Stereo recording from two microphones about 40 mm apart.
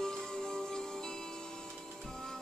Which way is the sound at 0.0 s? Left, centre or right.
Centre.